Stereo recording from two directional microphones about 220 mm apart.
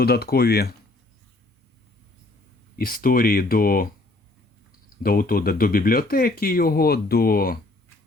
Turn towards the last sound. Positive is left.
turn(degrees=40)  # may be behind; listen again after turning